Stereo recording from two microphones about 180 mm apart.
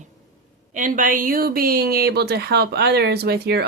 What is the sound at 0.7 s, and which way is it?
A woman's voice, 45° right (ahead or behind).